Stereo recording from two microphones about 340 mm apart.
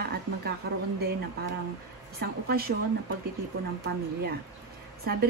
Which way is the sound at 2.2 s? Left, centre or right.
Right.